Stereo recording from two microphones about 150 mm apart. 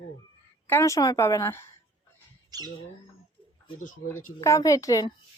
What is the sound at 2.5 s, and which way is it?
Speech, 25° right (ahead or behind).